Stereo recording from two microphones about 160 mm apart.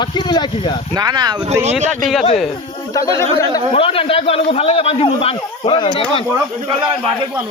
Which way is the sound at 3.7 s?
35° left (ahead or behind).